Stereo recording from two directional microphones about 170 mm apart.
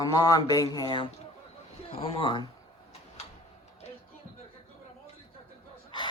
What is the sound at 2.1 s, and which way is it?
Speech, 30° left (ahead or behind).